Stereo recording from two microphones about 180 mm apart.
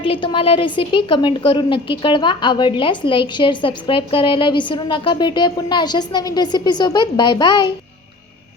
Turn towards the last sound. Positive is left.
turn(degrees=25)  # may be behind; listen again after turning